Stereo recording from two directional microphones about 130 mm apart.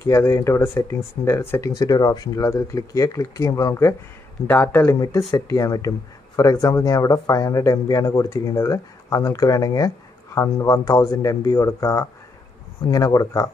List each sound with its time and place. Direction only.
0.0 s speech: 20° left (ahead or behind)
1.8 s speech: 30° left (ahead or behind)